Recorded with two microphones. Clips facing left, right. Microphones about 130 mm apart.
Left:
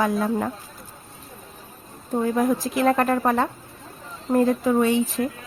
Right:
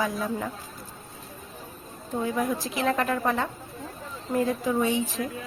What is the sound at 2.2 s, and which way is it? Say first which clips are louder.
A woman's voice: left 6 dB; 50° left (ahead or behind).